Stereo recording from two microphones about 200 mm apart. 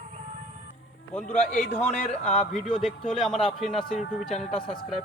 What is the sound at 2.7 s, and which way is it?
Speech, centre (ahead or behind).